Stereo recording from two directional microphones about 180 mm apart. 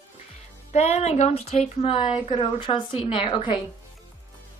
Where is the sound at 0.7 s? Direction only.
35° left (ahead or behind).